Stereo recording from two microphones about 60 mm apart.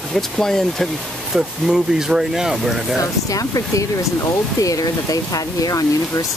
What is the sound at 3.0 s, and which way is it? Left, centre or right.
Speech, left.